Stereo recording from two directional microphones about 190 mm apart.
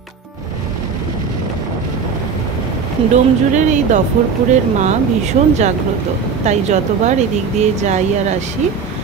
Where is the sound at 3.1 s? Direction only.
40° right (ahead or behind).